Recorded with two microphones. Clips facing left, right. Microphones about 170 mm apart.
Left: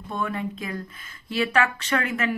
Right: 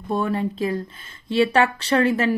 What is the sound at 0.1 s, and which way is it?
Speech, 35° right (ahead or behind).